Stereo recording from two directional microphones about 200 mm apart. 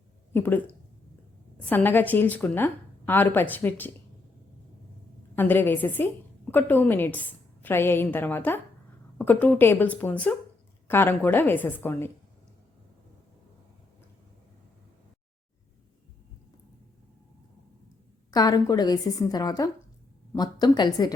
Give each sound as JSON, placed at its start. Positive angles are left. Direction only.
{"t": 0.3, "sound": "a woman's voice", "side_deg": 10}
{"t": 5.4, "sound": "a woman's voice", "side_deg": 10}
{"t": 18.3, "sound": "a woman's voice", "side_deg": 20}